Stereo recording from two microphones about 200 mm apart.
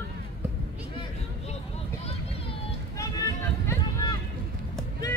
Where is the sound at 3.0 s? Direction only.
15° left (ahead or behind).